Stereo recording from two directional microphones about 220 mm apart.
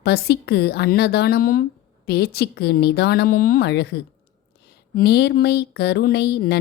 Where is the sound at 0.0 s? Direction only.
45° left (ahead or behind).